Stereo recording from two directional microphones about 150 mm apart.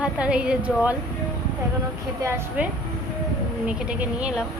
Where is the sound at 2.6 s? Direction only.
10° right (ahead or behind).